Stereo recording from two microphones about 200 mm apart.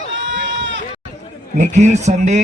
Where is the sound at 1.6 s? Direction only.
35° right (ahead or behind).